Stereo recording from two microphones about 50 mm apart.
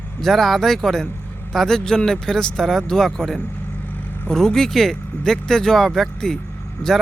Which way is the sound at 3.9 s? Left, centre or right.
Left.